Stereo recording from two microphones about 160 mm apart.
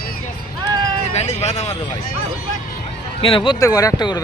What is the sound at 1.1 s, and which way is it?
Speech, 45° left (ahead or behind).